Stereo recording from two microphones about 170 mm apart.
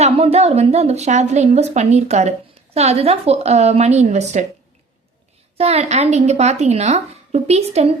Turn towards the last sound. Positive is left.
turn(degrees=-40)  # may be behind; listen again after turning